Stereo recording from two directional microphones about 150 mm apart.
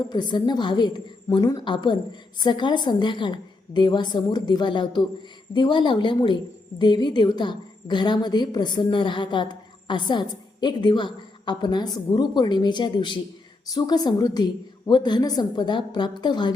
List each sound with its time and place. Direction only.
0.1 s a woman's voice: 30° left (ahead or behind)